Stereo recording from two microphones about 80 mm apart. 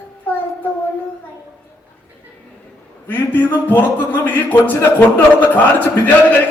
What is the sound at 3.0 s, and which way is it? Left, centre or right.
A man's voice, left.